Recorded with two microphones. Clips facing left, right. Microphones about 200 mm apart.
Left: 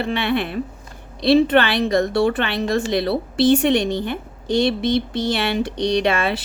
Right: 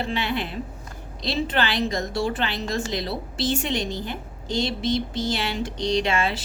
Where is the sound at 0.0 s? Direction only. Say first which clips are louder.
Left 6 dB; 60° left (ahead or behind).